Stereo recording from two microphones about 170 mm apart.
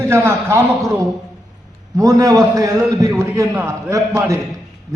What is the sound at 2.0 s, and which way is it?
A man's voice, 20° right (ahead or behind).